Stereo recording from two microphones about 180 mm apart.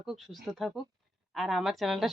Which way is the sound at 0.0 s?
Centre (ahead or behind).